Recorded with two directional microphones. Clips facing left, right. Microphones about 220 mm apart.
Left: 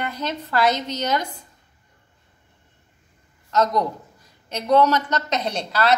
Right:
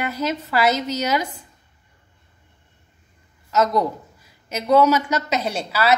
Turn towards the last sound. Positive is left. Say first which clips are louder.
# right 1 dB
turn(degrees=-5)  # may be behind; listen again after turning